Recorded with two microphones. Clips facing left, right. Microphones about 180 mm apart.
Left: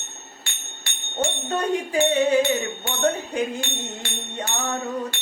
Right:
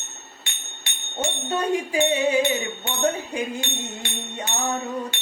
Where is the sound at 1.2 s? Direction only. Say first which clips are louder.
Left 1 dB; 10° right (ahead or behind).